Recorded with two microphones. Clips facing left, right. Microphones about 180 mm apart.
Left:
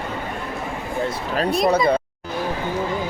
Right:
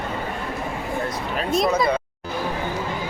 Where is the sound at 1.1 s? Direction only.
35° left (ahead or behind).